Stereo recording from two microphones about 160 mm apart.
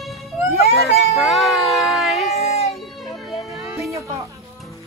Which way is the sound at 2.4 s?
40° left (ahead or behind).